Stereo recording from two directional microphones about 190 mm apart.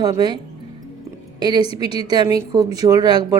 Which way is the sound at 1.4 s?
20° right (ahead or behind).